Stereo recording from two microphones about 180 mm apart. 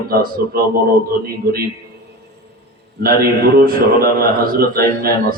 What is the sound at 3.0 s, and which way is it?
Speech, 55° right (ahead or behind).